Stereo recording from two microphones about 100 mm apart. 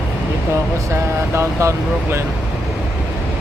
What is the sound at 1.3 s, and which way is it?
Speech, 25° right (ahead or behind).